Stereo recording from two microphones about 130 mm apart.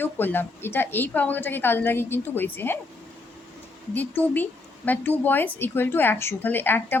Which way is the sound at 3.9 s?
15° left (ahead or behind).